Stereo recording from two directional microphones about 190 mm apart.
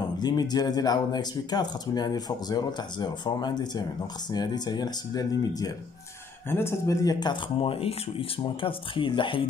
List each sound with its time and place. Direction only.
0.2 s speech: 20° left (ahead or behind)